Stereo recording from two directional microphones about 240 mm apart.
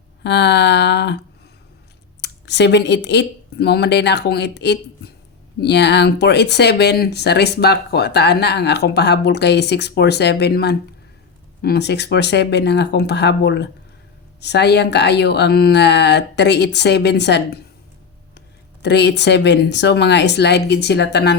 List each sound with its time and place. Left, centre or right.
0.2 s speech: left
2.2 s speech: left